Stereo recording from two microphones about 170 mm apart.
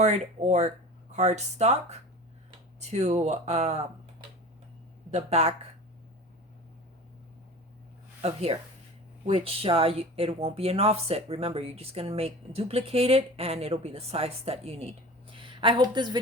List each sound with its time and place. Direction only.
0.0 s speech: 40° right (ahead or behind)
5.1 s speech: 40° right (ahead or behind)
8.2 s speech: 35° right (ahead or behind)